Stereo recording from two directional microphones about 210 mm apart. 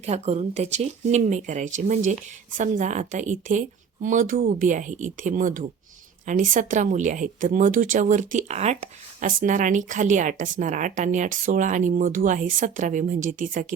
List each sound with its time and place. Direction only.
0.0 s a woman's voice: 30° right (ahead or behind)